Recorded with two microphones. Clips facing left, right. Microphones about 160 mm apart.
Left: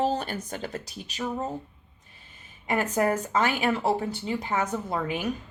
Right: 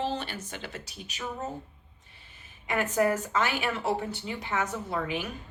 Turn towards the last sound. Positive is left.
turn(degrees=40)  # may be behind; listen again after turning